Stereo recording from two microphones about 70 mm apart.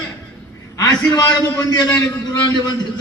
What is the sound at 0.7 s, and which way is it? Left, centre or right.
A man's voice, left.